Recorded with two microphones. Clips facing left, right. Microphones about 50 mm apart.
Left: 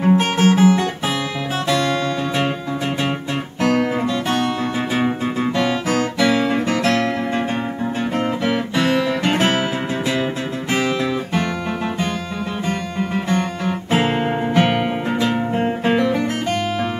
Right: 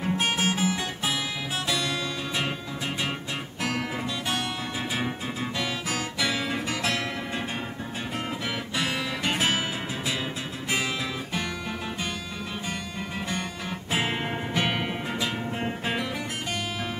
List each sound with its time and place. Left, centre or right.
0.0 s music: left
3.6 s music: left
10.7 s music: left
12.6 s music: left